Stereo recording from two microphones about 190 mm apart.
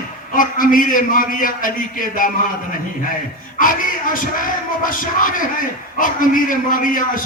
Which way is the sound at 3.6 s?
45° left (ahead or behind).